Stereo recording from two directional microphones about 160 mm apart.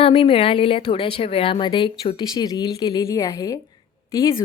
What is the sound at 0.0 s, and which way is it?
Speech, 35° left (ahead or behind).